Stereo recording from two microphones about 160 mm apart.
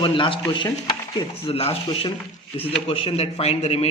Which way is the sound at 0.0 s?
30° left (ahead or behind).